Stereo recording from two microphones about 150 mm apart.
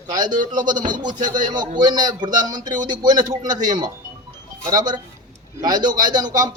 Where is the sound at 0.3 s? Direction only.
30° right (ahead or behind).